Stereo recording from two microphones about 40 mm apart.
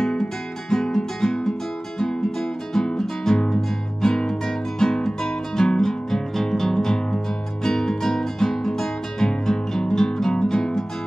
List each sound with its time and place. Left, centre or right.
0.0 s music: centre